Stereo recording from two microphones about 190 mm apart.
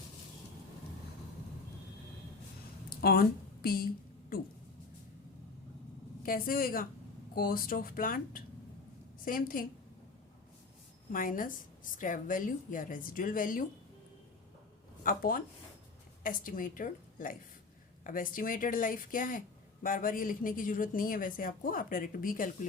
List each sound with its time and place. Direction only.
2.9 s a woman's voice: 50° left (ahead or behind)
6.2 s speech: 50° left (ahead or behind)
11.1 s speech: 45° left (ahead or behind)
15.0 s speech: 50° left (ahead or behind)